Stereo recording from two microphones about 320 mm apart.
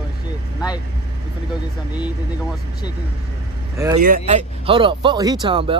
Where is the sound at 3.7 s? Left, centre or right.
Centre.